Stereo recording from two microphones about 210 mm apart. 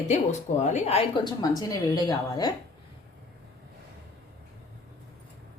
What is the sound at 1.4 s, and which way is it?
A woman's voice, 20° left (ahead or behind).